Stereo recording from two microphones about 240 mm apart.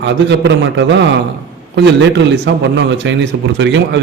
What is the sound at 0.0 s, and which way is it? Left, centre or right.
Speech, right.